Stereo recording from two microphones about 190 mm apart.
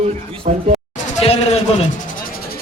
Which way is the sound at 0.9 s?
30° left (ahead or behind).